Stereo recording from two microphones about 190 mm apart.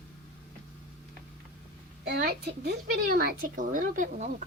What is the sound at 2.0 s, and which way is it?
Speech, 60° right (ahead or behind).